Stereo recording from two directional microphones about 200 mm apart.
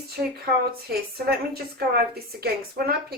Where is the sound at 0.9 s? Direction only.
50° right (ahead or behind).